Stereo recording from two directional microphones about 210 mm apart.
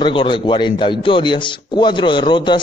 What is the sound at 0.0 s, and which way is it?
A man's voice, 25° left (ahead or behind).